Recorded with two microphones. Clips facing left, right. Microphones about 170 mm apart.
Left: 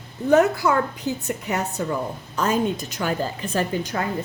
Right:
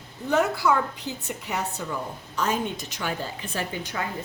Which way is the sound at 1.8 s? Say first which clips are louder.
Left 6 dB; 55° left (ahead or behind).